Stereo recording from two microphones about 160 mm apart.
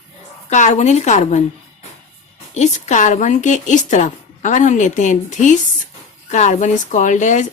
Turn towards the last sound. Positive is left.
turn(degrees=50)  # may be behind; listen again after turning